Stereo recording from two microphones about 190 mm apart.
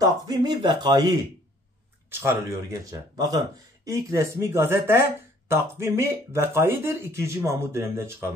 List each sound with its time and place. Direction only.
0.0 s speech: 20° right (ahead or behind)